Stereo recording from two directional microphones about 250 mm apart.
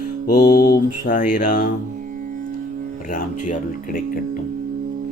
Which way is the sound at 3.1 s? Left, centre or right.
Left.